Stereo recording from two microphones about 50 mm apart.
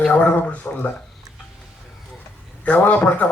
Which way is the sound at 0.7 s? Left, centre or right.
Left.